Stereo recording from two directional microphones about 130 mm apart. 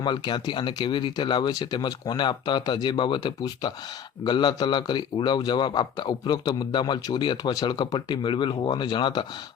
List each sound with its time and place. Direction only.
0.0 s a man's voice: 35° left (ahead or behind)